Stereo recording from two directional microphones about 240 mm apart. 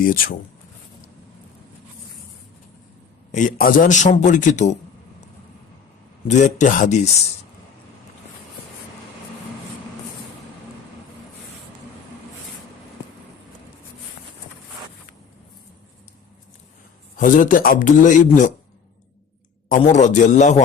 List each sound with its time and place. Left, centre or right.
0.0 s a man's voice: left
3.3 s a man's voice: left
6.2 s speech: left
17.2 s a man's voice: left
19.8 s a man's voice: left